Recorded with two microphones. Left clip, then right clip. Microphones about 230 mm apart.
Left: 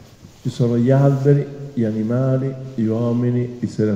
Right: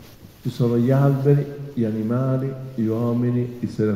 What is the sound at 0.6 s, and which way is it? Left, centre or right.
A man's voice, left.